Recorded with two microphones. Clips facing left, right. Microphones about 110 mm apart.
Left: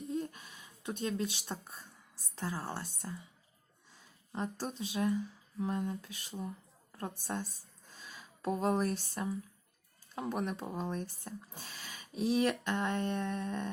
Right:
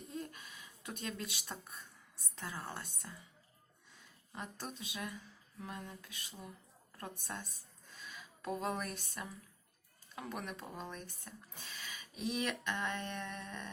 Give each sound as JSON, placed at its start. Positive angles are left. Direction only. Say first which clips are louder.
{"t": 0.2, "sound": "a sound", "louder": "left 6 dB", "side_deg": 30}
{"t": 2.3, "sound": "speech", "louder": "left 6 dB", "side_deg": 35}
{"t": 4.3, "sound": "speech", "louder": "left 8 dB", "side_deg": 35}